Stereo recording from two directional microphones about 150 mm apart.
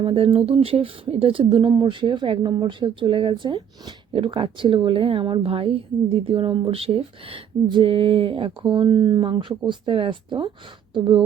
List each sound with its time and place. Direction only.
0.0 s speech: 35° right (ahead or behind)